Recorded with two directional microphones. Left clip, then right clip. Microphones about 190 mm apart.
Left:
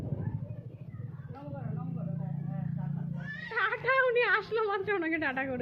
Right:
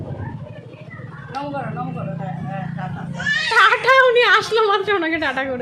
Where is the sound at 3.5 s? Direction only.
30° right (ahead or behind).